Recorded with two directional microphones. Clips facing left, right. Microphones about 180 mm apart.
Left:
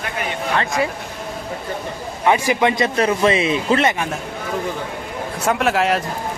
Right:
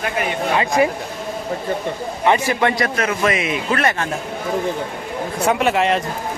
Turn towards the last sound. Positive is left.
turn(degrees=0)  # may be behind; listen again after turning